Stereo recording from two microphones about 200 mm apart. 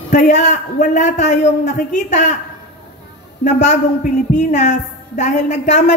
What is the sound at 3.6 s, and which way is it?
A man's voice, 35° left (ahead or behind).